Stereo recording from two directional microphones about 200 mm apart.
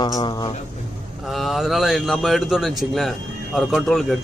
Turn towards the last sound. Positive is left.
turn(degrees=0)  # may be behind; listen again after turning